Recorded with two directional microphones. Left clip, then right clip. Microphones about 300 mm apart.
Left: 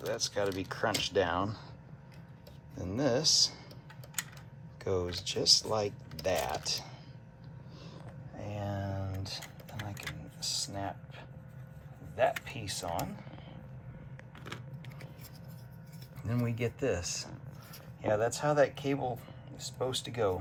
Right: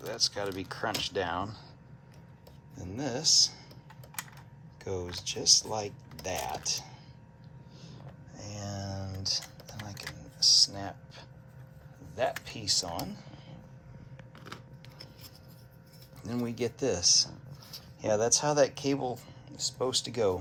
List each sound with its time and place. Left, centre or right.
0.0 s speech: centre
2.7 s speech: centre
4.8 s speech: centre
8.4 s a sound: centre
12.1 s speech: centre
16.2 s speech: centre